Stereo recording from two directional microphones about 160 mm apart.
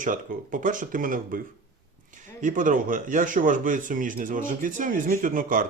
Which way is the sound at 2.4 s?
55° right (ahead or behind).